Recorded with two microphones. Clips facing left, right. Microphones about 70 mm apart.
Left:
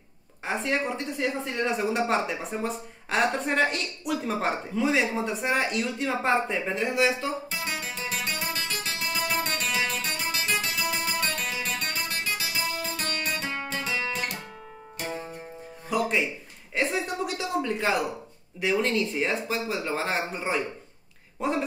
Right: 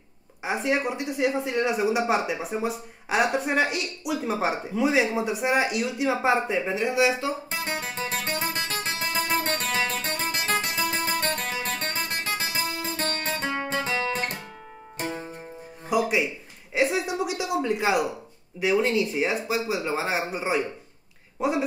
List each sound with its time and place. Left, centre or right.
0.4 s speech: centre
7.6 s music: right
15.9 s music: centre
16.7 s a sound: centre
18.6 s a woman's voice: centre